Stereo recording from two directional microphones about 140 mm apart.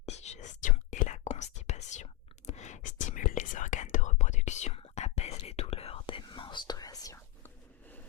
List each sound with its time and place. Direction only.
0.0 s whispering: 50° left (ahead or behind); by 8.0 s 15° left (ahead or behind)